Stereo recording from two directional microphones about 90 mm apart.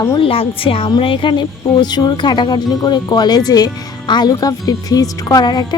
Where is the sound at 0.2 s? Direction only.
90° left.